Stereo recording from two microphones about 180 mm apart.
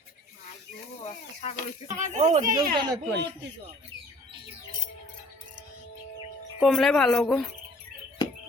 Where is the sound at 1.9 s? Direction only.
40° right (ahead or behind).